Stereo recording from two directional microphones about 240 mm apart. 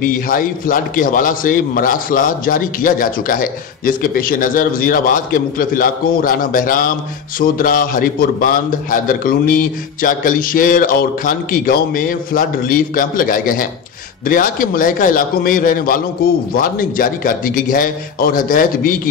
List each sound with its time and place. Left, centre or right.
0.0 s a man's voice: left